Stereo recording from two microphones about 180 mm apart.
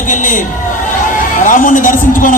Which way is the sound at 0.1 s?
45° left (ahead or behind).